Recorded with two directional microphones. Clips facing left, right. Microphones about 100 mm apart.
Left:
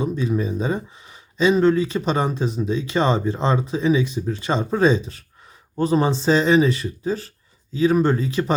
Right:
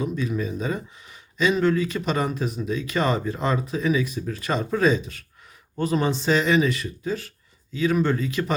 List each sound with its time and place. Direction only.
0.0 s speech: 30° left (ahead or behind)